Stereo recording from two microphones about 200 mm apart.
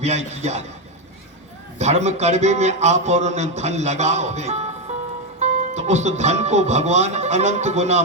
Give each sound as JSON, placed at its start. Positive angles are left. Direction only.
{"t": 0.0, "sound": "speech", "side_deg": -35}
{"t": 1.8, "sound": "speech", "side_deg": -35}